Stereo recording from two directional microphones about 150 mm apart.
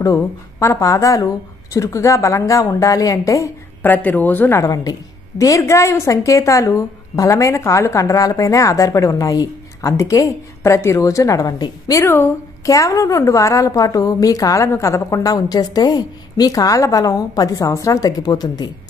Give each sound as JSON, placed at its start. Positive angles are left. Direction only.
{"t": 0.0, "sound": "a woman's voice", "side_deg": 20}